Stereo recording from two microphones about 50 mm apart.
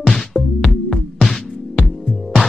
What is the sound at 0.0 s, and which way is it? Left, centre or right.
Music, centre.